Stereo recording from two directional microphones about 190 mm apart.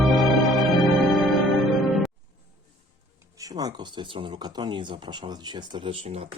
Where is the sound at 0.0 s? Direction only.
Centre (ahead or behind).